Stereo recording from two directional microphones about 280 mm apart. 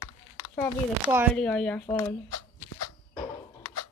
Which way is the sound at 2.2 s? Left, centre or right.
Left.